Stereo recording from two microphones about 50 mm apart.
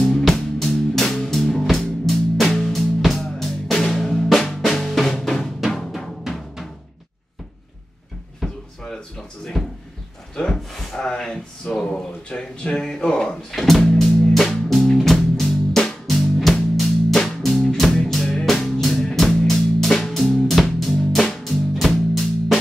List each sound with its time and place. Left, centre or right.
0.1 s music: centre
5.1 s drum: centre
8.4 s drawer open or close: centre
9.6 s a sound: centre
10.3 s a sound: centre
10.8 s wood: centre
11.1 s a sound: centre
11.8 s speech: centre
13.7 s music: centre